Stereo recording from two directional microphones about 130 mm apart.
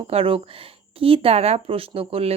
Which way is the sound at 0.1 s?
45° right (ahead or behind).